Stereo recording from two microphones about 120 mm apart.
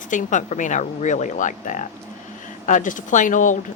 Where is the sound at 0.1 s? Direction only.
90° left.